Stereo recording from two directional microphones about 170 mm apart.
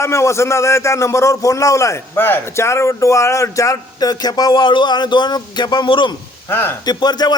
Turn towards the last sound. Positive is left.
turn(degrees=25)  # may be behind; listen again after turning